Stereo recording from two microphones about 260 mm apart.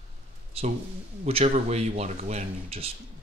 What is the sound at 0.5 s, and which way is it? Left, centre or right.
Speech, right.